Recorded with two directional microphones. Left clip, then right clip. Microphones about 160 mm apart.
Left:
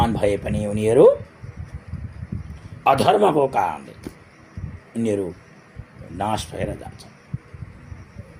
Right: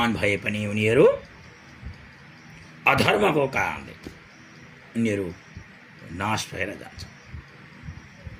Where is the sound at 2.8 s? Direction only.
20° right (ahead or behind).